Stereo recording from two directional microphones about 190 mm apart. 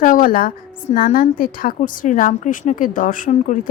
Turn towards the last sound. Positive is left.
turn(degrees=40)  # may be behind; listen again after turning